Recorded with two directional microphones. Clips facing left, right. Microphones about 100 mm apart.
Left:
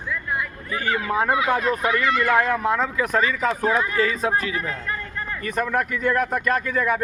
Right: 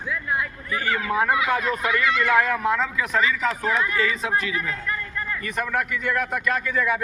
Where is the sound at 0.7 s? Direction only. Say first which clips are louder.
Left 1 dB; 25° left (ahead or behind).